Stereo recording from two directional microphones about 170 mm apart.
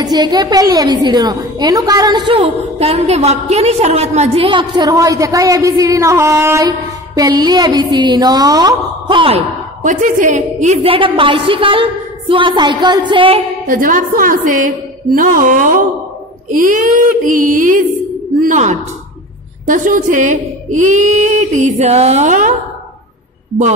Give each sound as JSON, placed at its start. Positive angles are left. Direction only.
{"t": 0.0, "sound": "a woman's voice", "side_deg": -25}
{"t": 9.8, "sound": "a woman's voice", "side_deg": -50}
{"t": 13.7, "sound": "a woman's voice", "side_deg": -55}